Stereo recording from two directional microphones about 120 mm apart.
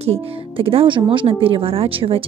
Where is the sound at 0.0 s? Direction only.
55° right (ahead or behind).